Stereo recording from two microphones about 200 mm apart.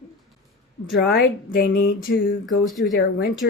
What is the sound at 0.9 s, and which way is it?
Speech, 50° left (ahead or behind).